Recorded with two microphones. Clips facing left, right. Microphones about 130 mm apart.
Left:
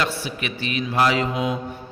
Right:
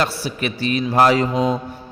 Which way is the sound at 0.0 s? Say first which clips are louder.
Right 4 dB; 40° right (ahead or behind).